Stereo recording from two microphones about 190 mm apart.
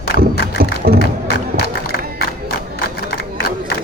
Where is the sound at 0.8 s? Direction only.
60° right (ahead or behind).